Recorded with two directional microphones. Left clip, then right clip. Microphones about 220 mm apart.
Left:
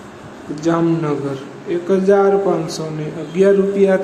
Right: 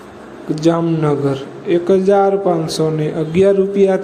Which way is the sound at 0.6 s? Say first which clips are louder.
Right 1 dB; 20° right (ahead or behind).